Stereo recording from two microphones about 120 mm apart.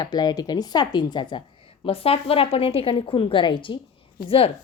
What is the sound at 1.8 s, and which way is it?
A woman's voice, 50° left (ahead or behind).